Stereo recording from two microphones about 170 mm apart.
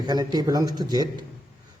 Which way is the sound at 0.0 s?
25° right (ahead or behind).